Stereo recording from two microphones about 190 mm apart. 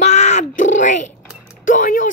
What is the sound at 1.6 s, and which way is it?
Speech, 45° left (ahead or behind).